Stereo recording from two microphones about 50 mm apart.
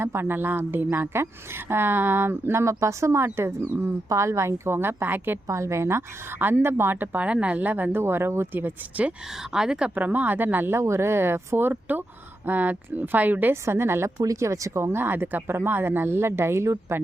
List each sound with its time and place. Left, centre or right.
0.0 s speech: right
5.5 s speech: right
6.4 s speech: right
7.3 s speech: right
7.9 s speech: right
9.5 s a woman's voice: centre
9.9 s speech: right
10.8 s speech: right
11.7 s speech: right
13.5 s speech: right
14.9 s speech: right